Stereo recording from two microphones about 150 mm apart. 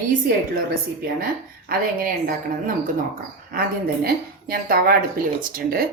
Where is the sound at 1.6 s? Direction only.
65° right (ahead or behind).